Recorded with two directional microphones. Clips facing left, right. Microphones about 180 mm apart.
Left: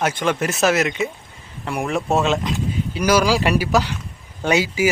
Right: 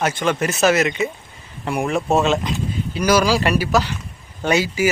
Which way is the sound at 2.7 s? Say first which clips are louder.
Right 1 dB; 10° left (ahead or behind).